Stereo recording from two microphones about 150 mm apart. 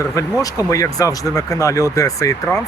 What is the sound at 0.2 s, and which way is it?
Speech, 20° left (ahead or behind).